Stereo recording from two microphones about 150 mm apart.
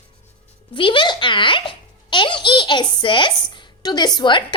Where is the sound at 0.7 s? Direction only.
35° left (ahead or behind).